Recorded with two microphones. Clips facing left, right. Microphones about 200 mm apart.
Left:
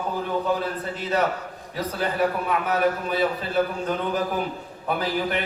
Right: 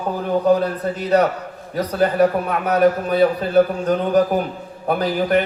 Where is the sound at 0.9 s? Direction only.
50° right (ahead or behind).